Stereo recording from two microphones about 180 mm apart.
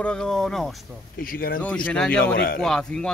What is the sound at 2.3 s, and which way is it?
Speech, 55° left (ahead or behind).